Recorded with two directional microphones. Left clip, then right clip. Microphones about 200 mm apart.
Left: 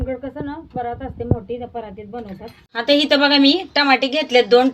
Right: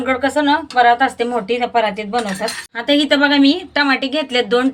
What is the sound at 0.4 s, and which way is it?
Speech, 15° right (ahead or behind).